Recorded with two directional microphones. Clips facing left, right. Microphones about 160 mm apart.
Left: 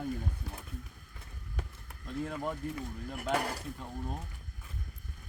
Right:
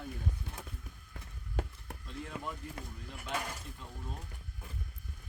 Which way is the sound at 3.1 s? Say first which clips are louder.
Left 7 dB; 65° left (ahead or behind).